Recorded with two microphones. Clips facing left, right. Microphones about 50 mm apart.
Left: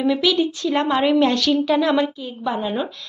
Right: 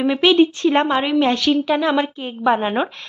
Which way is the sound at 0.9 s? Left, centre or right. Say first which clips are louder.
Even; centre.